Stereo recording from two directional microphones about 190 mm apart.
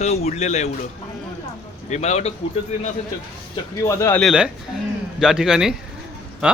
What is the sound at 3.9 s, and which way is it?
Speech, 15° left (ahead or behind).